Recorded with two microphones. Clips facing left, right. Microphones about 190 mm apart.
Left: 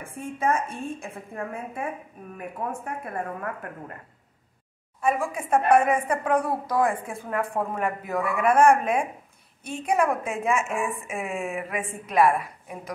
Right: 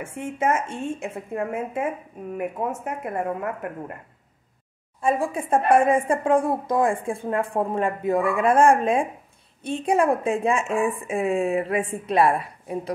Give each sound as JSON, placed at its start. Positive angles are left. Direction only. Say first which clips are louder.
{"t": 0.0, "sound": "speech", "louder": "right 3 dB", "side_deg": -25}
{"t": 5.0, "sound": "a woman's voice", "louder": "right 2 dB", "side_deg": -30}